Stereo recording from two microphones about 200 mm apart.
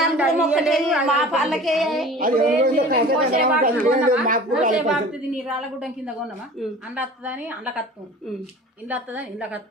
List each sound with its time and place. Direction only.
0.0 s a woman's voice: 5° right (ahead or behind)
2.1 s a woman's voice: 45° right (ahead or behind)
4.9 s a woman's voice: 5° right (ahead or behind)
8.9 s a woman's voice: 5° right (ahead or behind)